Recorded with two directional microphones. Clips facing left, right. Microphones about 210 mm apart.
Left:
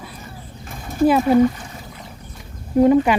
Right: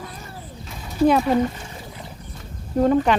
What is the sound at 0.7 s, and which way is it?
Horse, 50° left (ahead or behind).